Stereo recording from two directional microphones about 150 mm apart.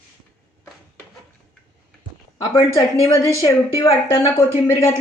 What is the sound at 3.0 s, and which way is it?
Speech, 20° left (ahead or behind).